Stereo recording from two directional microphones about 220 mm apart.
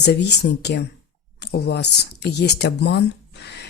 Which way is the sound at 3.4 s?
50° left (ahead or behind).